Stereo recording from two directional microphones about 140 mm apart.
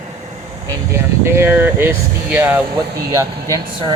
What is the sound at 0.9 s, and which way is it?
Speech, 20° right (ahead or behind).